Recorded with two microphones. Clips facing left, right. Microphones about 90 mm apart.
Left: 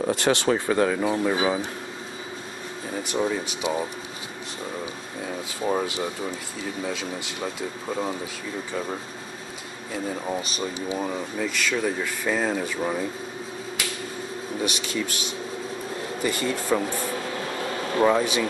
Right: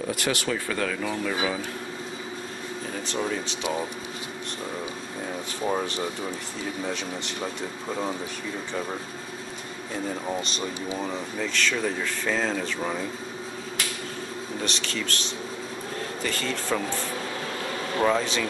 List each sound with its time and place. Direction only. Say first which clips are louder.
0.1 s speech: left 6 dB; 30° left (ahead or behind)
3.1 s speech: left 4 dB; 15° left (ahead or behind)
5.7 s speech: left 2 dB; 5° left (ahead or behind)
10.2 s speech: left 1 dB; 5° left (ahead or behind)
14.6 s speech: left 4 dB; 10° left (ahead or behind)
18.0 s speech: left 3 dB; 10° left (ahead or behind)